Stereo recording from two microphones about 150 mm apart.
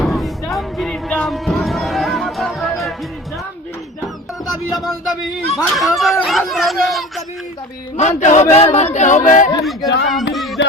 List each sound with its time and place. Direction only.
0.0 s music: centre (ahead or behind)
4.7 s a sound: centre (ahead or behind)
5.7 s speech: centre (ahead or behind)
7.9 s speech: 50° left (ahead or behind)
9.6 s speech: centre (ahead or behind)
10.3 s a sound: centre (ahead or behind)